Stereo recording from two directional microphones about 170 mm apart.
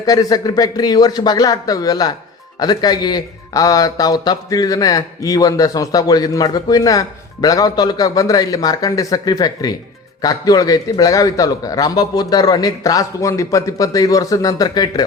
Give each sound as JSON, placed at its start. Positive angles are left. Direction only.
{"t": 0.0, "sound": "a man's voice", "side_deg": 20}